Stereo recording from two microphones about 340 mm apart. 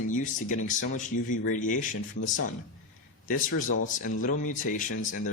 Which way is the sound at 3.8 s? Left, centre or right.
Left.